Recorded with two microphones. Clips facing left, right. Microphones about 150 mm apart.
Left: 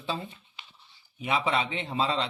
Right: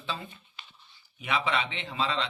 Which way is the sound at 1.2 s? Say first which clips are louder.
Left 2 dB; 35° left (ahead or behind).